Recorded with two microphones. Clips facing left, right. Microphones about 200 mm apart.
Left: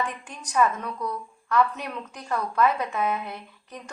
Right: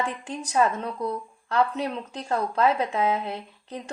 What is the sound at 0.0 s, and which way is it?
A woman's voice, 30° right (ahead or behind).